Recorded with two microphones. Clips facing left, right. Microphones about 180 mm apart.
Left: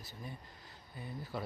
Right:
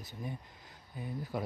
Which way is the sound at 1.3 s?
15° right (ahead or behind).